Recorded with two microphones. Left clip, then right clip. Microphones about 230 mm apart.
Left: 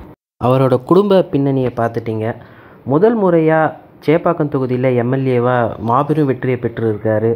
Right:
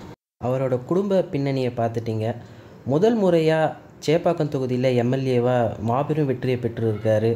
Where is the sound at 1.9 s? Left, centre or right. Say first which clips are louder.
Left 7 dB; centre.